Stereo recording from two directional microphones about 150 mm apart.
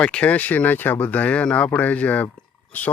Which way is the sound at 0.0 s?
10° left (ahead or behind).